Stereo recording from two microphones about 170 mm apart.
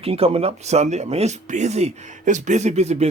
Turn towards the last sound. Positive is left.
turn(degrees=-40)  # may be behind; listen again after turning